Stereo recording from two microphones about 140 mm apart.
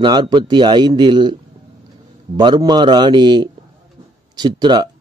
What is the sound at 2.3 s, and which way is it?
Speech, 30° right (ahead or behind).